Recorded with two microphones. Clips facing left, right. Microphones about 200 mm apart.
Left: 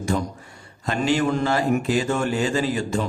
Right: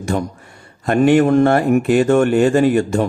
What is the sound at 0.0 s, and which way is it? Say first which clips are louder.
A man's voice: right 4 dB; 60° right (ahead or behind).